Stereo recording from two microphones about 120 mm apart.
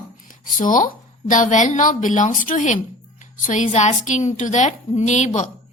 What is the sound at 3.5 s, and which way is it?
A woman's voice, 75° left (ahead or behind).